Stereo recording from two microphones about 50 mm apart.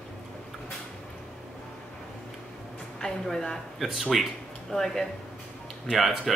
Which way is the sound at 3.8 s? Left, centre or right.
Centre.